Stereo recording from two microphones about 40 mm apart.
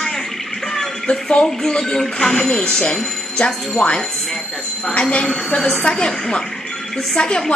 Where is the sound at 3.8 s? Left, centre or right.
Left; by 7.1 s centre.